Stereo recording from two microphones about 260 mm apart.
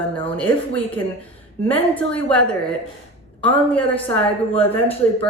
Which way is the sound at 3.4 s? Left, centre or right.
Centre.